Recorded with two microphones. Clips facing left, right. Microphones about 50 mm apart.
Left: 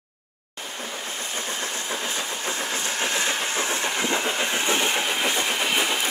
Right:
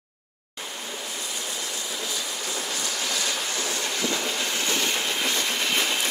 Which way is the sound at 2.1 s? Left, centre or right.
Left.